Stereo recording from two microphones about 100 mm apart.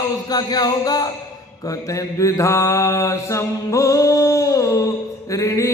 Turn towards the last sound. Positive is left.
turn(degrees=35)  # may be behind; listen again after turning